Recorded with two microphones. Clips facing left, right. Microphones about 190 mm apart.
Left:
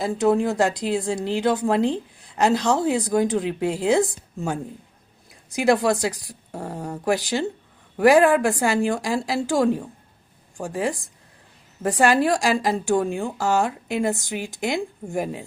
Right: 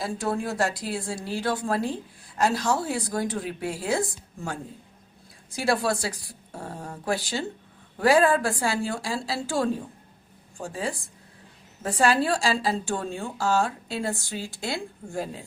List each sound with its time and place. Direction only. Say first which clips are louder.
0.0 s a woman's voice: left 8 dB; 20° left (ahead or behind)